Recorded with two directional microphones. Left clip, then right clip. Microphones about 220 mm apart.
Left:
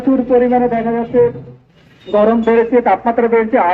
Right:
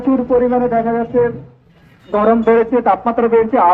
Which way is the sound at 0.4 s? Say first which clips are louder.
Left 1 dB; 30° left (ahead or behind).